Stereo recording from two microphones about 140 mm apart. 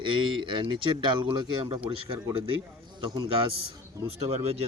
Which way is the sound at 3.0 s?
30° right (ahead or behind).